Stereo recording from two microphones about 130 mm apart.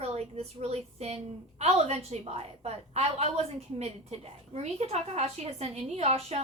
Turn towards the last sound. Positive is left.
turn(degrees=-55)  # may be behind; listen again after turning